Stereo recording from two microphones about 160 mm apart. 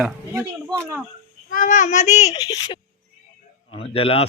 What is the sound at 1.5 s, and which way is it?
Child singing, 55° left (ahead or behind).